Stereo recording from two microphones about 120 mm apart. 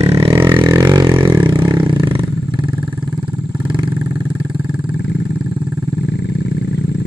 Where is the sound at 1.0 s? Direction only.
40° right (ahead or behind).